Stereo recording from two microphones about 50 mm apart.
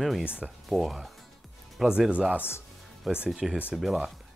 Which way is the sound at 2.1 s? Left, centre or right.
Right.